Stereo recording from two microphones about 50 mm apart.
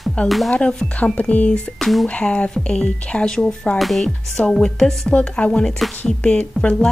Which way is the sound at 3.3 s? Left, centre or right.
Centre.